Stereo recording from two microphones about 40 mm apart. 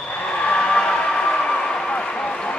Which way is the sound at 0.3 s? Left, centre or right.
Left.